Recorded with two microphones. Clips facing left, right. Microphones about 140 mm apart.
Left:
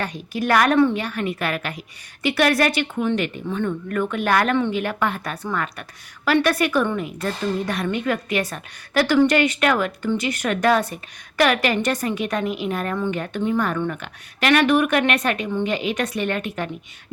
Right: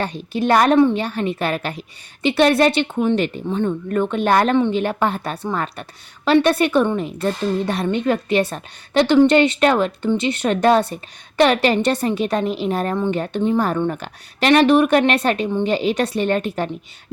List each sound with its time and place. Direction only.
0.0 s a woman's voice: 25° right (ahead or behind)